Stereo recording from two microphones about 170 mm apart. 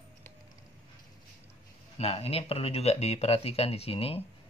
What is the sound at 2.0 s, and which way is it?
Speech, 35° left (ahead or behind).